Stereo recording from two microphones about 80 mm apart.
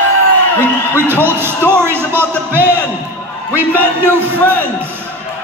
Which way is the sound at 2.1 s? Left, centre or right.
Right.